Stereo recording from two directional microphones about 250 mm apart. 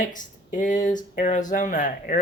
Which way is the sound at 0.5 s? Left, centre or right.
Left.